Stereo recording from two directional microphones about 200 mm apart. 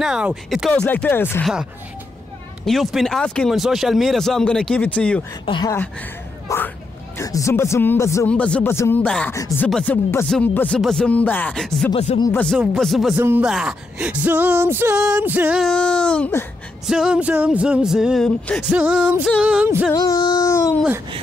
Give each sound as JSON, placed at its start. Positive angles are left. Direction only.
{"t": 0.0, "sound": "speech", "side_deg": -5}
{"t": 2.6, "sound": "speech", "side_deg": 0}
{"t": 5.4, "sound": "speech", "side_deg": 25}
{"t": 6.5, "sound": "a sound", "side_deg": 15}
{"t": 7.2, "sound": "speech", "side_deg": 15}
{"t": 11.9, "sound": "speech", "side_deg": 30}
{"t": 12.2, "sound": "speech", "side_deg": 10}
{"t": 16.8, "sound": "speech", "side_deg": -5}
{"t": 19.9, "sound": "speech", "side_deg": 20}